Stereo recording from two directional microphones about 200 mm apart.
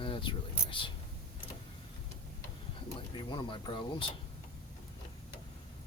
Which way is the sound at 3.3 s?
25° left (ahead or behind).